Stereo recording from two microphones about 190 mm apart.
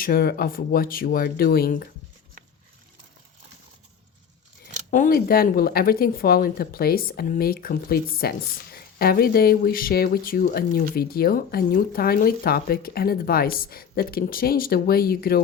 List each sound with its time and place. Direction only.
0.0 s speech: 50° left (ahead or behind)
4.9 s speech: 45° left (ahead or behind)